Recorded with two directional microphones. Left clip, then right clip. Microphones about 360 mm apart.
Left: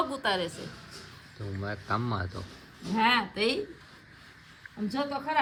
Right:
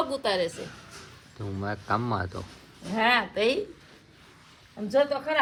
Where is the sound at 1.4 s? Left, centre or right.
Right.